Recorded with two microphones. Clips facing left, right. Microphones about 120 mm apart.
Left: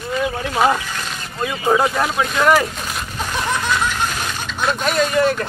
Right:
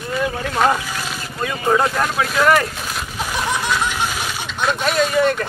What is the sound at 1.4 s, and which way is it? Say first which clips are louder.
Speech: left 1 dB; 5° left (ahead or behind).